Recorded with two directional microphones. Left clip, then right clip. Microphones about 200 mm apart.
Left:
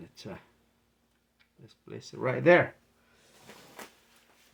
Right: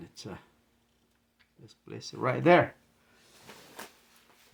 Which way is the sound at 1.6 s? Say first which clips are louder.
Right 1 dB; 30° right (ahead or behind).